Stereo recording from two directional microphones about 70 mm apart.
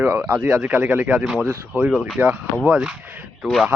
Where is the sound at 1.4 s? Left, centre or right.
Right.